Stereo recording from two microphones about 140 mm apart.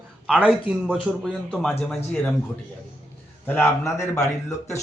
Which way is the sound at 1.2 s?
5° left (ahead or behind).